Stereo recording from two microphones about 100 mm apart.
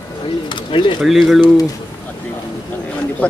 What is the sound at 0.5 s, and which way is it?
Bird, 55° left (ahead or behind).